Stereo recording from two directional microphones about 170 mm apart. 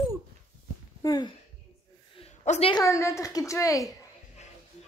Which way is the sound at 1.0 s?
25° left (ahead or behind).